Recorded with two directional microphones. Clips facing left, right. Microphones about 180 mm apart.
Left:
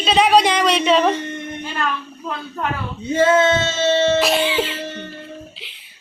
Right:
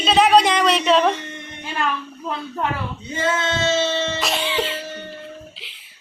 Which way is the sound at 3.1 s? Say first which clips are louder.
Left 8 dB; 55° left (ahead or behind).